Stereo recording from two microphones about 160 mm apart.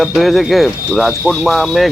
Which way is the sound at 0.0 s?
Centre (ahead or behind).